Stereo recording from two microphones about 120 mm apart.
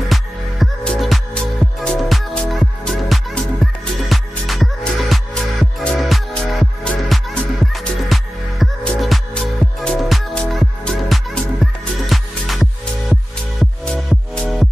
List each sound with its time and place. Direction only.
0.1 s music: centre (ahead or behind)